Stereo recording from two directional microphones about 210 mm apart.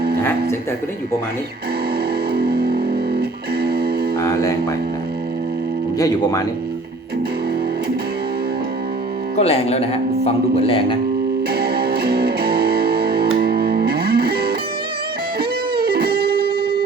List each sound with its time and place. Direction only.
2.3 s music: 50° right (ahead or behind)
4.2 s speech: 15° left (ahead or behind)
6.0 s speech: 15° left (ahead or behind)
9.4 s speech: 30° left (ahead or behind)
11.5 s music: 50° right (ahead or behind)